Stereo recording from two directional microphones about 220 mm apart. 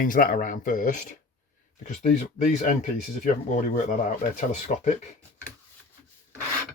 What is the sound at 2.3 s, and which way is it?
Speech, 35° left (ahead or behind).